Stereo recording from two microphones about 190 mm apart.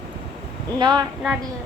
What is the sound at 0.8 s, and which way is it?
Speech, 20° right (ahead or behind).